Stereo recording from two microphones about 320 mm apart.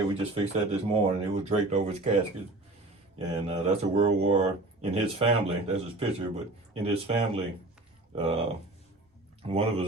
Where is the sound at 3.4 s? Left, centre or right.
Centre.